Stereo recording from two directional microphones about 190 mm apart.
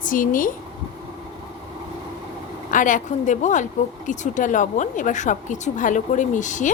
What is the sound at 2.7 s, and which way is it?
Speech, 45° left (ahead or behind).